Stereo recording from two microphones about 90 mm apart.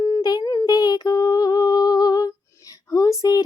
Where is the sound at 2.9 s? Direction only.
40° left (ahead or behind).